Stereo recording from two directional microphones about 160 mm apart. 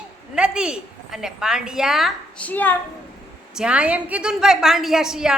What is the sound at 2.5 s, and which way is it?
Speech, 10° left (ahead or behind).